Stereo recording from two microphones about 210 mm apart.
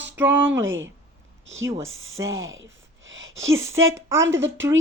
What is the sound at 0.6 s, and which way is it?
Speech, 65° right (ahead or behind).